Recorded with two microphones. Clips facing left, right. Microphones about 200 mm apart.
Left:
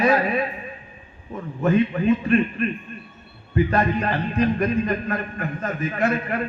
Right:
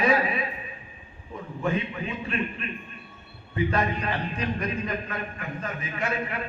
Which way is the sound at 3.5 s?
50° left (ahead or behind).